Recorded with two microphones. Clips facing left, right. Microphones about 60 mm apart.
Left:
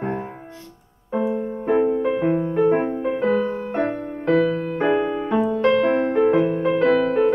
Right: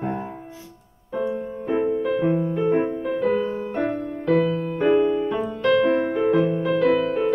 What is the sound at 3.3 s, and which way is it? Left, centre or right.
Music, centre.